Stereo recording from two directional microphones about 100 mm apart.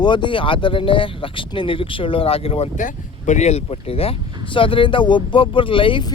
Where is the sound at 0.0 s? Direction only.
50° left (ahead or behind).